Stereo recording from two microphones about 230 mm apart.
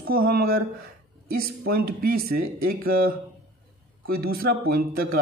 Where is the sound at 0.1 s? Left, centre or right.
Right.